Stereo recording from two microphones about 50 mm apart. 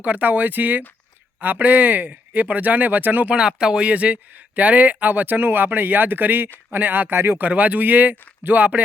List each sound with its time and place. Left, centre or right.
0.0 s speech: right
3.3 s speech: centre; by 8.8 s right